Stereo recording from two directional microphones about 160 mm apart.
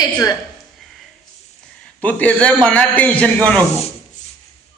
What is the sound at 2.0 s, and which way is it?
A man's voice, 10° left (ahead or behind).